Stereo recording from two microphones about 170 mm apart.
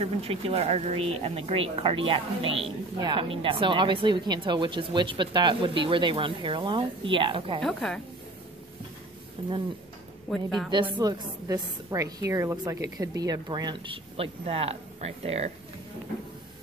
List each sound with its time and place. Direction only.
0.0 s a woman's voice: 35° right (ahead or behind)
7.6 s a woman's voice: 5° left (ahead or behind)
9.4 s speech: 30° right (ahead or behind)
10.3 s a woman's voice: centre (ahead or behind)
10.7 s a woman's voice: 25° right (ahead or behind)